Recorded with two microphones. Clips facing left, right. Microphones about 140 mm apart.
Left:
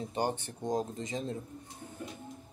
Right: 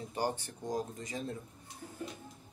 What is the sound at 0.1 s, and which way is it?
Speech, 20° left (ahead or behind).